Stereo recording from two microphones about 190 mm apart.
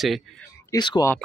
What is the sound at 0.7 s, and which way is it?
Speech, 20° left (ahead or behind).